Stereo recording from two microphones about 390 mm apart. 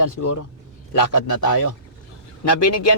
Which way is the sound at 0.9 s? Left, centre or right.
Left.